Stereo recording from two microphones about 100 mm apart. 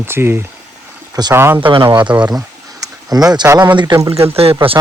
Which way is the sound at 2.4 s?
35° right (ahead or behind).